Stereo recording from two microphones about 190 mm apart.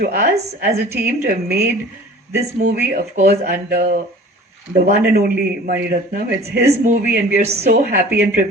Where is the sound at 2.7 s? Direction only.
45° right (ahead or behind).